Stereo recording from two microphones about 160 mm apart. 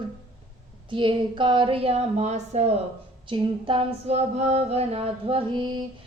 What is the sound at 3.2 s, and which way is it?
Female singing, 30° right (ahead or behind).